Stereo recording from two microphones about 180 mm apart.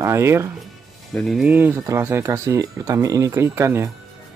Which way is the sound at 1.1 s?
Centre (ahead or behind).